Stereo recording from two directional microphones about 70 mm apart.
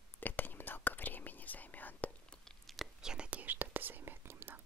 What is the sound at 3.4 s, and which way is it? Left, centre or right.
Whispering, right.